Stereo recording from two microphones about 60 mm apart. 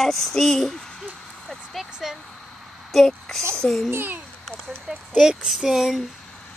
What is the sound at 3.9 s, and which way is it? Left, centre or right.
Speech, right.